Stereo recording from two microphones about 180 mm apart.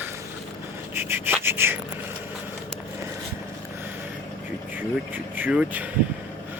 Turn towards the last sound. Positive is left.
turn(degrees=-5)  # may be behind; listen again after turning